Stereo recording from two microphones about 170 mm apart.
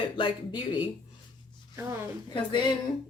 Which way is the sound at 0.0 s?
25° left (ahead or behind).